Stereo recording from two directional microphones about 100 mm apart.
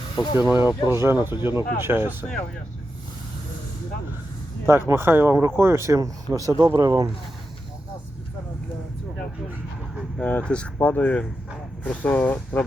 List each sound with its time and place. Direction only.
0.2 s speech: 50° left (ahead or behind)
0.4 s speech: 25° right (ahead or behind)
4.9 s speech: 25° right (ahead or behind)
10.2 s speech: 10° left (ahead or behind)